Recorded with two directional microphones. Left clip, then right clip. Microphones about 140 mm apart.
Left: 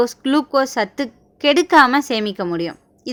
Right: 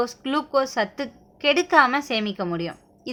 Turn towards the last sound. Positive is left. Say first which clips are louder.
# left 6 dB
turn(degrees=30)  # may be behind; listen again after turning